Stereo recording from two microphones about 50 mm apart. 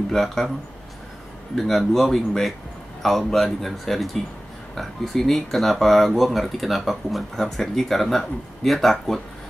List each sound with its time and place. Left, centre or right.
0.1 s speech: centre
1.5 s speech: centre